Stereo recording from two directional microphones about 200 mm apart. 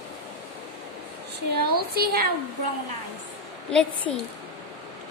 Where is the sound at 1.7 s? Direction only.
50° right (ahead or behind).